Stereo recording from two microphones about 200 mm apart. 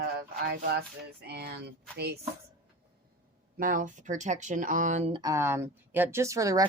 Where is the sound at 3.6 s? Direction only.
45° right (ahead or behind).